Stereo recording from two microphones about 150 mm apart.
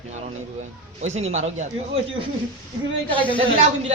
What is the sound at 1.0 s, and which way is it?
A man's voice, 50° right (ahead or behind).